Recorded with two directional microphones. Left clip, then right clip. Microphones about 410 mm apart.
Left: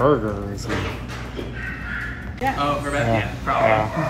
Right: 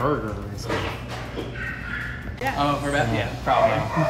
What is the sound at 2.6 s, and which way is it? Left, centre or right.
Speech, right.